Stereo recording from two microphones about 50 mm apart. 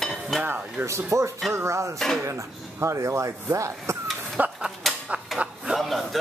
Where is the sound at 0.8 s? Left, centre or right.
Right.